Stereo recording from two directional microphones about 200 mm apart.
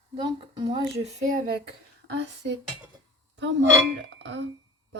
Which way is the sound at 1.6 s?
60° right (ahead or behind).